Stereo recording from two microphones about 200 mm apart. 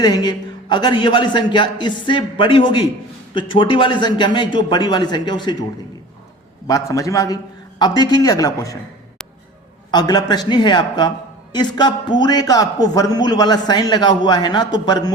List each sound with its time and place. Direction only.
0.0 s a man's voice: 20° left (ahead or behind)
6.7 s a man's voice: 15° left (ahead or behind)
9.9 s a man's voice: 20° left (ahead or behind)